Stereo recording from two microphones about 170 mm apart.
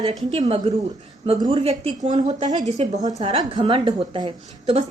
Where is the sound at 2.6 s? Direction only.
45° right (ahead or behind).